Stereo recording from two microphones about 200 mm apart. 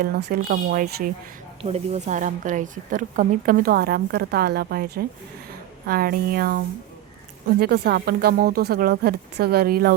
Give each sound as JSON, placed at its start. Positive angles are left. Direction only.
{"t": 0.0, "sound": "a woman's voice", "side_deg": -55}
{"t": 1.6, "sound": "a woman's voice", "side_deg": -30}
{"t": 7.6, "sound": "a woman's voice", "side_deg": -50}